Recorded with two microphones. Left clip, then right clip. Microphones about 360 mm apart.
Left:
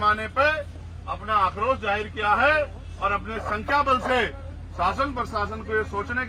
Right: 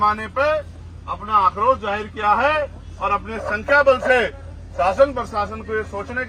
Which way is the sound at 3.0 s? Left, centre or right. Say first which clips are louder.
Right 4 dB; centre.